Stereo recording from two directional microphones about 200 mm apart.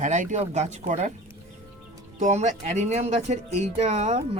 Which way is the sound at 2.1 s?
35° right (ahead or behind).